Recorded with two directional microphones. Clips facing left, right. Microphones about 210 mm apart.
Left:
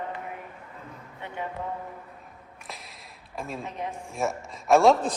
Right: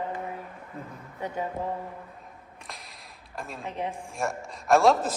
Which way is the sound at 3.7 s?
30° right (ahead or behind).